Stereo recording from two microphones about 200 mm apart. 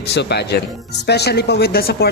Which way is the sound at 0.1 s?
55° left (ahead or behind).